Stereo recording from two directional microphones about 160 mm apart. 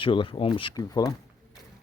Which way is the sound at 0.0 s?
30° left (ahead or behind).